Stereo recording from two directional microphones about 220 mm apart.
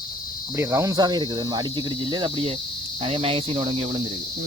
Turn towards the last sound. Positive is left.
turn(degrees=-25)  # may be behind; listen again after turning